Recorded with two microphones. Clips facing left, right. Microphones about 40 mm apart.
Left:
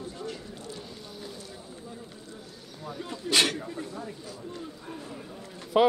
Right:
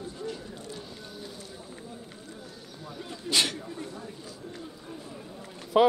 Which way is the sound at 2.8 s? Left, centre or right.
Centre.